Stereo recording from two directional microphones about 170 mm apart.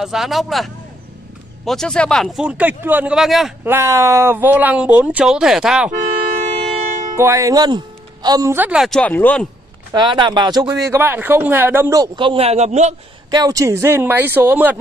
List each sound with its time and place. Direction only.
0.0 s speech: centre (ahead or behind)
3.6 s speech: 15° right (ahead or behind)
6.4 s siren: 40° right (ahead or behind)
7.2 s speech: 15° right (ahead or behind); by 9.5 s 10° left (ahead or behind)
9.9 s speech: 25° right (ahead or behind)
13.3 s speech: 20° right (ahead or behind)